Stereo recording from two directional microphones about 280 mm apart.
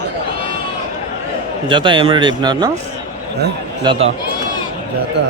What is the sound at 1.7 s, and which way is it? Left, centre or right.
Speech, centre.